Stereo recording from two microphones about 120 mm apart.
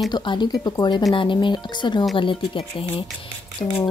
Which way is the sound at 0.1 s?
40° left (ahead or behind).